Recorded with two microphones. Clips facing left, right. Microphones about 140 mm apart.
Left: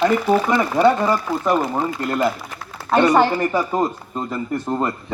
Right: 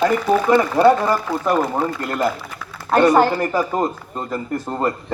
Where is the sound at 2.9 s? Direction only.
5° right (ahead or behind).